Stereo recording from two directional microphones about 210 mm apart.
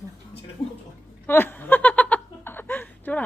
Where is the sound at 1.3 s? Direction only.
10° left (ahead or behind).